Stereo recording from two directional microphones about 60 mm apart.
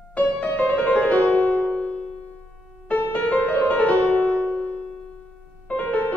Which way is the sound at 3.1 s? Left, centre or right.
Left.